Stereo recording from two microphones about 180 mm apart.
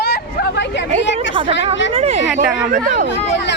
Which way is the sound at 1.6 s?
90° left.